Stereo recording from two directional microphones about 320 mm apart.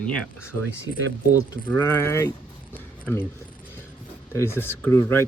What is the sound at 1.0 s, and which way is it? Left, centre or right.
Speech, right.